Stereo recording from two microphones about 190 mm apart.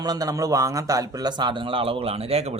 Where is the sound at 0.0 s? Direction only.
20° right (ahead or behind).